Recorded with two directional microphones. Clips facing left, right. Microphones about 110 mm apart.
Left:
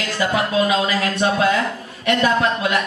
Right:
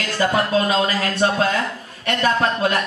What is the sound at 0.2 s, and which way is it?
Speech, 35° right (ahead or behind).